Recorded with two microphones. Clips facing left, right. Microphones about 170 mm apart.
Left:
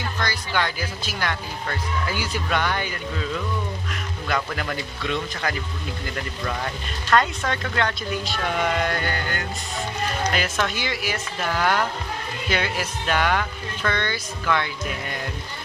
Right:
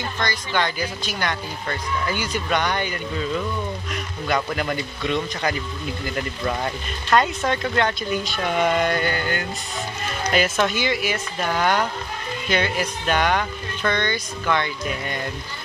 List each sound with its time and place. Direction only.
0.2 s speech: 5° left (ahead or behind)
4.5 s speech: 5° right (ahead or behind)
6.4 s speech: 15° right (ahead or behind)
7.7 s speech: 5° right (ahead or behind)